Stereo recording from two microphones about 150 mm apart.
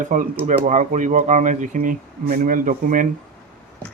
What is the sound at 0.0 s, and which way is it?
Speech, 60° right (ahead or behind).